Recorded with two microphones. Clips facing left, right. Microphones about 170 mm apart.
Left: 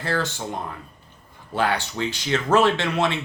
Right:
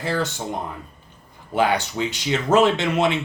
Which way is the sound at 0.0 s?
15° right (ahead or behind).